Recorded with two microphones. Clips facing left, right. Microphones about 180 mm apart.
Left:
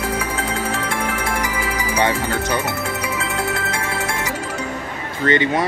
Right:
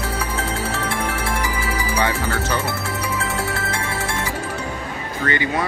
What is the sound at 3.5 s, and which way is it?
Music, 35° right (ahead or behind).